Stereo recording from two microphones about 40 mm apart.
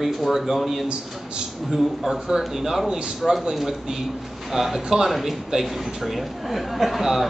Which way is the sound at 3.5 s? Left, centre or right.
Centre.